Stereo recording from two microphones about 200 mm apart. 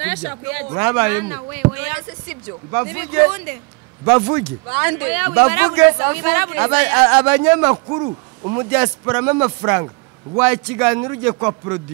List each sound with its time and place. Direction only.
0.2 s speech: 10° right (ahead or behind)
7.7 s a man's voice: 25° right (ahead or behind)